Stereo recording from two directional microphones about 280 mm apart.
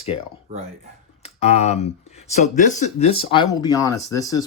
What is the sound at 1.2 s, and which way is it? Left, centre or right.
Speech, left.